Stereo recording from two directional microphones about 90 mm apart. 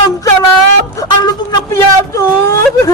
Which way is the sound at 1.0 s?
40° left (ahead or behind).